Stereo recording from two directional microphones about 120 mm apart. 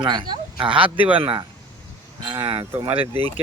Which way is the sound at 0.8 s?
15° right (ahead or behind).